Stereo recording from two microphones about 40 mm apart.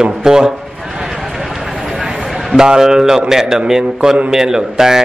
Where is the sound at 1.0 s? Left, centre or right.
Centre.